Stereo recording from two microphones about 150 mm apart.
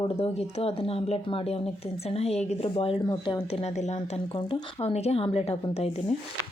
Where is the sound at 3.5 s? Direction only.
50° left (ahead or behind).